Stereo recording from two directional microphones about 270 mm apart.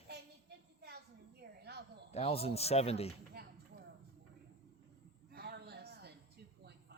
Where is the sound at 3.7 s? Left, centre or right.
Right.